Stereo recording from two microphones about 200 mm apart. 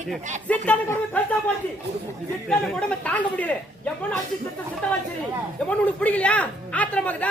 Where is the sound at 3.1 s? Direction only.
5° left (ahead or behind).